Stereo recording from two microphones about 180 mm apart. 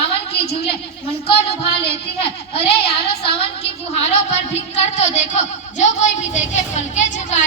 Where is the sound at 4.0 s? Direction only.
40° left (ahead or behind).